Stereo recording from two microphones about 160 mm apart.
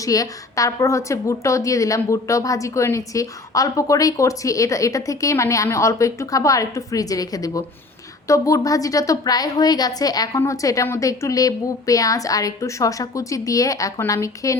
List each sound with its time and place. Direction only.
0.0 s a woman's voice: 20° left (ahead or behind)